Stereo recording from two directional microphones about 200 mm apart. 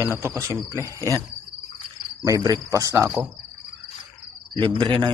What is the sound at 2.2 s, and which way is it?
Speech, 15° right (ahead or behind).